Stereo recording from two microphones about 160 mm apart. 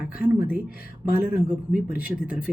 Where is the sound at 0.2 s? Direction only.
10° right (ahead or behind).